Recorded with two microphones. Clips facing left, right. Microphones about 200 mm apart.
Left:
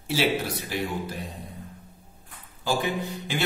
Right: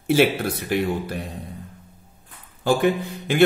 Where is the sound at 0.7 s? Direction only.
60° right (ahead or behind).